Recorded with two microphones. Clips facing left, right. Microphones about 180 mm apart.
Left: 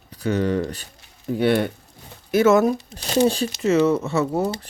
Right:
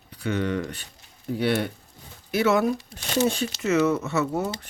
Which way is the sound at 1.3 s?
50° left (ahead or behind).